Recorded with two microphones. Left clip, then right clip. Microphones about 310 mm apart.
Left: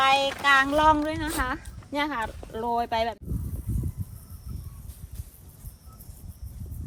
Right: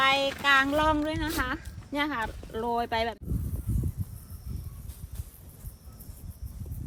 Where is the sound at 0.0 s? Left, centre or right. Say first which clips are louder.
Left 3 dB; centre.